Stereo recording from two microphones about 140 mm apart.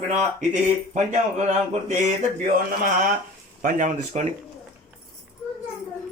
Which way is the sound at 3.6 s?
65° right (ahead or behind).